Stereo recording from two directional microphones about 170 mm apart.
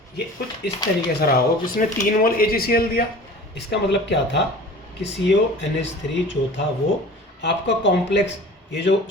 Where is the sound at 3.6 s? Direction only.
90° left.